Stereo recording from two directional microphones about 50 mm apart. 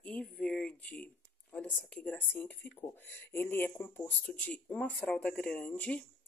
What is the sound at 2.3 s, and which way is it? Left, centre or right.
Speech, left.